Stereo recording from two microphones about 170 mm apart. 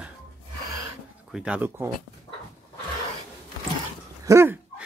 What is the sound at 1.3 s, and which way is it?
Speech, 5° right (ahead or behind).